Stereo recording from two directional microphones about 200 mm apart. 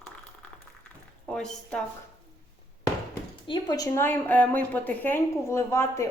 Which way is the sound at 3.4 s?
20° left (ahead or behind).